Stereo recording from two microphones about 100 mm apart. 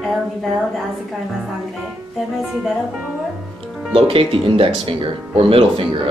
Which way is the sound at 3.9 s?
65° right (ahead or behind).